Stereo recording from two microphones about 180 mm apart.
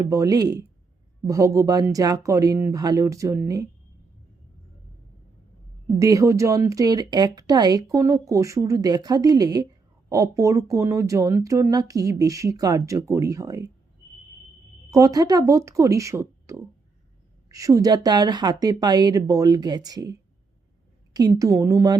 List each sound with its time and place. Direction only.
0.1 s speech: 20° right (ahead or behind)
6.0 s speech: 20° right (ahead or behind)
14.8 s speech: 15° right (ahead or behind)